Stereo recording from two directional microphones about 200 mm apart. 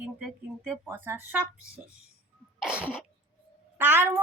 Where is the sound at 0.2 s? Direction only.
Centre (ahead or behind).